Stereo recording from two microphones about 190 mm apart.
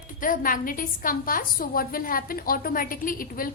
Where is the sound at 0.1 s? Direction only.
45° left (ahead or behind).